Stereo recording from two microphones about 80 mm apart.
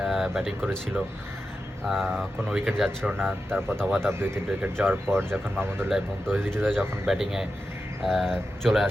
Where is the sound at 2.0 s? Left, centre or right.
Centre.